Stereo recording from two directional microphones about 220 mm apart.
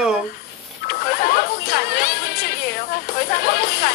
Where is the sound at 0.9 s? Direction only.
45° left (ahead or behind).